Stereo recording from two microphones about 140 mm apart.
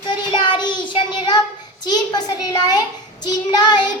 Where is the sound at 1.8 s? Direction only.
30° left (ahead or behind).